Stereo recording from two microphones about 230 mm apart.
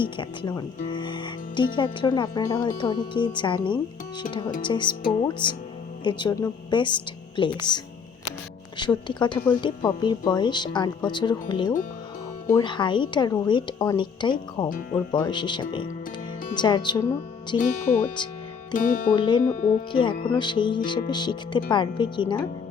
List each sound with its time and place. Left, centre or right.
0.0 s a woman's voice: centre
8.8 s speech: centre
14.7 s speech: left
14.9 s speech: centre
17.6 s speech: left
19.1 s speech: centre